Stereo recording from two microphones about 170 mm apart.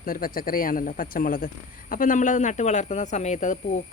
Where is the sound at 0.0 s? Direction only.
55° left (ahead or behind).